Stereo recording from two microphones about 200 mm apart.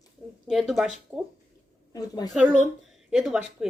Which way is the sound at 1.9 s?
20° left (ahead or behind).